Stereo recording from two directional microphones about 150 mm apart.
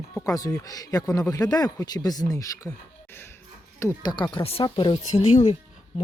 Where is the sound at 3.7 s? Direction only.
20° left (ahead or behind).